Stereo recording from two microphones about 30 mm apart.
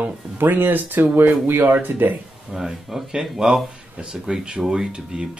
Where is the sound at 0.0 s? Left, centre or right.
Right.